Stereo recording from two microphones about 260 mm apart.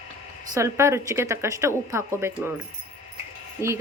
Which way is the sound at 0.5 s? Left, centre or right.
Centre.